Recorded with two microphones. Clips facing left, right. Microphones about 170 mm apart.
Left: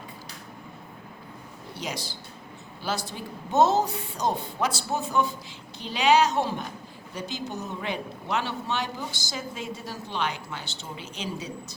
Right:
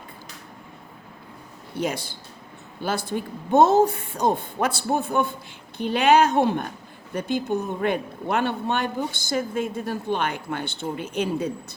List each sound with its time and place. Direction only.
1.8 s a man's voice: 55° right (ahead or behind)